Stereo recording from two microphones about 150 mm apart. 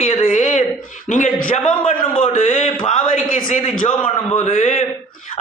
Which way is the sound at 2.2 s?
55° left (ahead or behind).